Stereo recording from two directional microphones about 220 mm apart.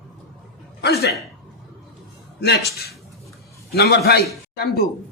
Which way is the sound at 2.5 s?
45° left (ahead or behind).